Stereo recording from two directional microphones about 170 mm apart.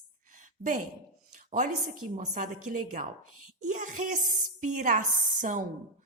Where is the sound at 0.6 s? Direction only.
45° right (ahead or behind).